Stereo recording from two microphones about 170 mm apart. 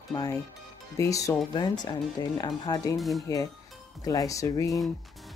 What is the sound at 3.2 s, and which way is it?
Speech, 20° left (ahead or behind).